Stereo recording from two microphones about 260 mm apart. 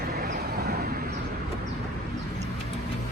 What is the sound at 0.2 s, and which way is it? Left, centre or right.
Vehicle, right.